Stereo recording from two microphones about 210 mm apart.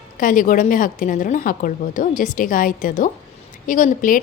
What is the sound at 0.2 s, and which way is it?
A woman's voice, 40° left (ahead or behind).